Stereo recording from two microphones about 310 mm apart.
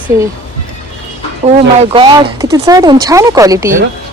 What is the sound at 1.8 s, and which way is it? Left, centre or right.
Speech, centre.